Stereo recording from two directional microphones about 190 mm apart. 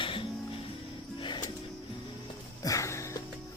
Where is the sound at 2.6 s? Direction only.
15° left (ahead or behind).